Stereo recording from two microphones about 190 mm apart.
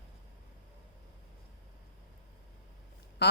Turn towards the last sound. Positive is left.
turn(degrees=60)  # may be behind; listen again after turning